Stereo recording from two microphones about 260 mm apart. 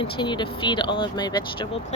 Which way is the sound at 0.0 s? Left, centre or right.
Centre.